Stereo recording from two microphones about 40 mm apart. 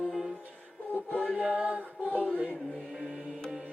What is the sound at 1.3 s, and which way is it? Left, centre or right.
Music, right.